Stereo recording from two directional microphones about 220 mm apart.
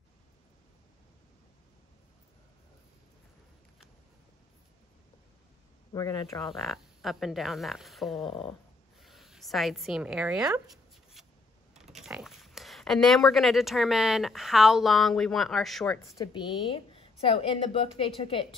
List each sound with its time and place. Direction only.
5.9 s speech: 15° left (ahead or behind)
6.4 s speech: centre (ahead or behind)
11.2 s a sound: centre (ahead or behind)
11.7 s speech: centre (ahead or behind)
16.2 s a woman's voice: 20° left (ahead or behind)